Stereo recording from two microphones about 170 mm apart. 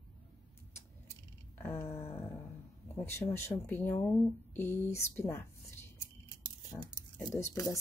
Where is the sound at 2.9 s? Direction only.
15° left (ahead or behind).